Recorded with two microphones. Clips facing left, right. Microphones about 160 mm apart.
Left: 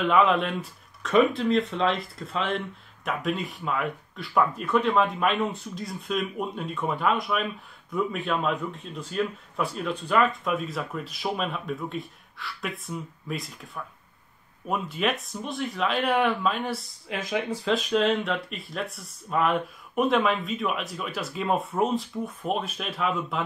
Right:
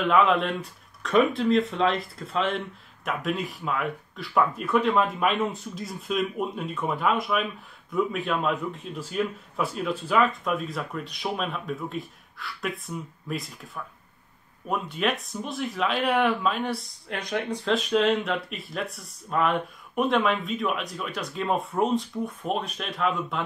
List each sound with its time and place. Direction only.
0.0 s speech: centre (ahead or behind)
14.7 s speech: centre (ahead or behind)